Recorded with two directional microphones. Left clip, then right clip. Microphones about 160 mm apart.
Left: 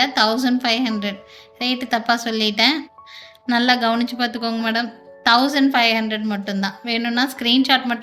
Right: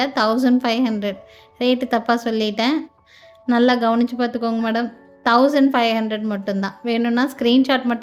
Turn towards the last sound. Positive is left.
turn(degrees=-75)  # may be behind; listen again after turning